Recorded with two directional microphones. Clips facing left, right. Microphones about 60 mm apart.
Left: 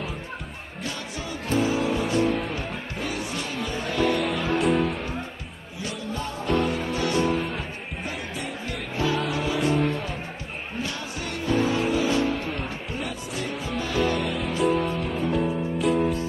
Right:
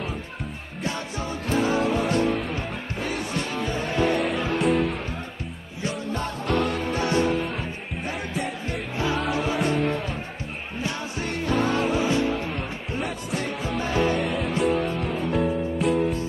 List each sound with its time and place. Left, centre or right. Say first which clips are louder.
3.6 s music: even; right
4.6 s music: even; centre
6.1 s music: right 1 dB; right
6.9 s music: right 1 dB; right
9.2 s music: right 1 dB; centre
10.8 s music: right 3 dB; right
13.8 s music: right 1 dB; right
14.2 s music: even; centre